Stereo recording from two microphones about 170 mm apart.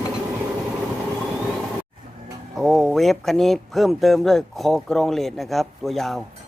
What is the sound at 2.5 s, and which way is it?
Speech, centre (ahead or behind).